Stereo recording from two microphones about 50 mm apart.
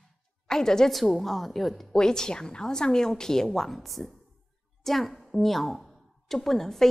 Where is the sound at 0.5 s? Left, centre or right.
Centre.